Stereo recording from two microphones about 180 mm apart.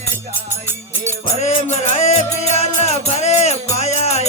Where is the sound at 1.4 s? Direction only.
40° left (ahead or behind).